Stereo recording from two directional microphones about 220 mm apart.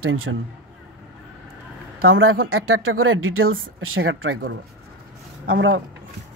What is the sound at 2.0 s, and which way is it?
Speech, 70° right (ahead or behind).